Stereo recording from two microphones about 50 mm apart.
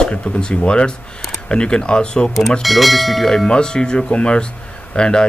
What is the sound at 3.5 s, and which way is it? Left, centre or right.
A man's voice, centre.